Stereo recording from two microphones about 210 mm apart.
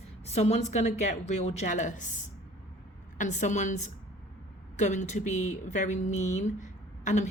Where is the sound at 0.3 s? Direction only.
30° left (ahead or behind).